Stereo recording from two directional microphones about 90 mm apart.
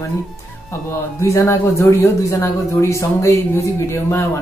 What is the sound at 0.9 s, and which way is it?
Speech, 30° left (ahead or behind).